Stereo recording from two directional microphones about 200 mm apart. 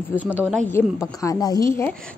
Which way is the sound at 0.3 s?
10° right (ahead or behind).